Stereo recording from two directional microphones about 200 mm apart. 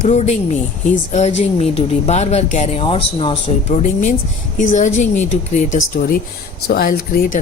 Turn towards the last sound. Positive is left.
turn(degrees=45)  # may be behind; listen again after turning